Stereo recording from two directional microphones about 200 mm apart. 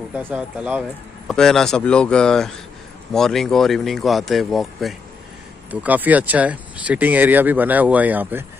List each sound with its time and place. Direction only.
0.1 s a man's voice: 5° right (ahead or behind)